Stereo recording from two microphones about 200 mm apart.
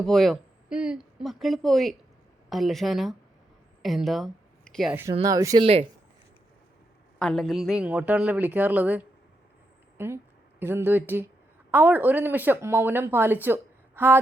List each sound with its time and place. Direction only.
0.0 s a woman's voice: centre (ahead or behind)
5.2 s speech: 15° right (ahead or behind)
7.2 s speech: centre (ahead or behind)